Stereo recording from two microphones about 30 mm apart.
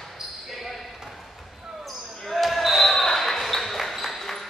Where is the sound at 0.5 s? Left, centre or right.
Centre.